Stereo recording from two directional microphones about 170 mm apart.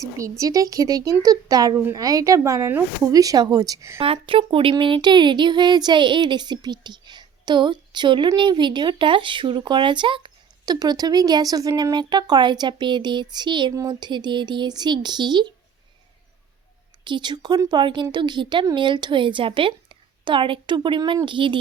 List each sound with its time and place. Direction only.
0.0 s speech: 20° right (ahead or behind)
4.0 s speech: 35° right (ahead or behind)
17.0 s speech: 25° right (ahead or behind)